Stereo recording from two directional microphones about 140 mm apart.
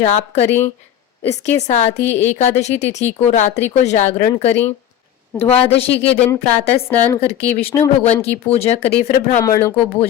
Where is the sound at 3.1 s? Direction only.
55° left (ahead or behind).